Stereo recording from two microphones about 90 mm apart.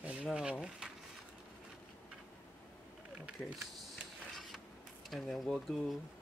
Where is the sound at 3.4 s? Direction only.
10° left (ahead or behind).